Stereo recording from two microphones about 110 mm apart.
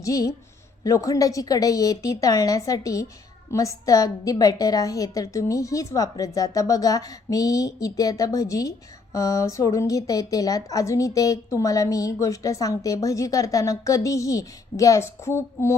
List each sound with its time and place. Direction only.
0.0 s a woman's voice: 30° left (ahead or behind)